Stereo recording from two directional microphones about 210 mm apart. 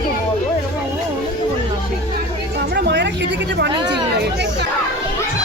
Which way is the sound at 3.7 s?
20° right (ahead or behind).